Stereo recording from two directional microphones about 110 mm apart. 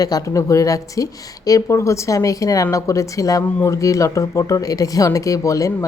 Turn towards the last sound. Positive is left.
turn(degrees=30)  # may be behind; listen again after turning